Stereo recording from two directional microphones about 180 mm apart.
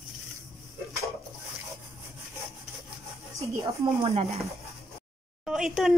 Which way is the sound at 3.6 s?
15° right (ahead or behind).